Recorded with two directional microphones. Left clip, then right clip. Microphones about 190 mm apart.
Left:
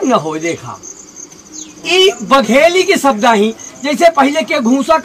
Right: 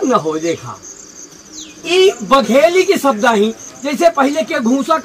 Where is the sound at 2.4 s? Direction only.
5° right (ahead or behind).